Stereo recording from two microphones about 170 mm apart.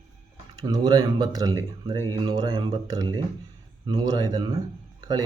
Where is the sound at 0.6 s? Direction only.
20° right (ahead or behind).